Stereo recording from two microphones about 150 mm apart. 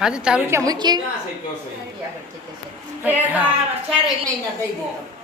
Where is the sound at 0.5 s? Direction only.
25° right (ahead or behind).